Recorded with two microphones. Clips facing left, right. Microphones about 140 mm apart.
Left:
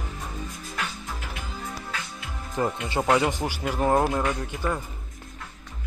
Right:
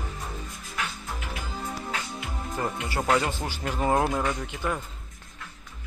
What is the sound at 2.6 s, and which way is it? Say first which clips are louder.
Speech: left 4 dB; 20° left (ahead or behind).